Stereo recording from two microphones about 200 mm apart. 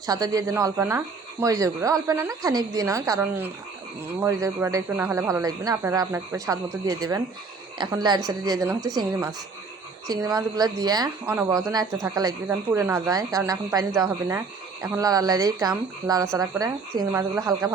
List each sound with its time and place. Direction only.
0.0 s speech: 20° right (ahead or behind)